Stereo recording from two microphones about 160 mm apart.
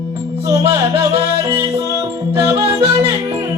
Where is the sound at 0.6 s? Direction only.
35° right (ahead or behind).